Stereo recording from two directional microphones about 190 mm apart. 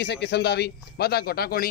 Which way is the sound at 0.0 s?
60° left (ahead or behind).